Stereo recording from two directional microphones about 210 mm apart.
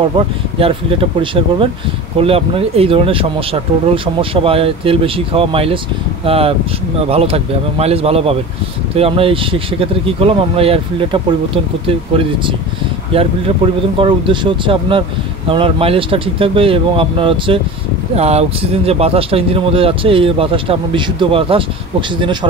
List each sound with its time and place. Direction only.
0.6 s speech: 25° right (ahead or behind)
13.9 s speech: 25° right (ahead or behind)